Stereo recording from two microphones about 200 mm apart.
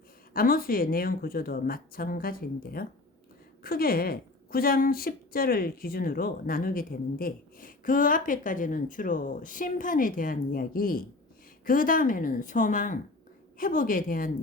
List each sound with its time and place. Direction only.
0.3 s a woman's voice: 45° left (ahead or behind)